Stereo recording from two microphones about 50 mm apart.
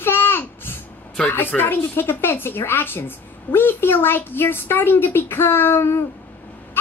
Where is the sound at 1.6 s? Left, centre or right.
Left.